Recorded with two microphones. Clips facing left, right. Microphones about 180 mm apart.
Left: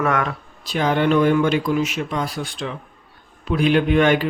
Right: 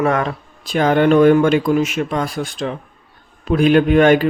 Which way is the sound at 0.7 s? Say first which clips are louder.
Right 5 dB; 50° right (ahead or behind).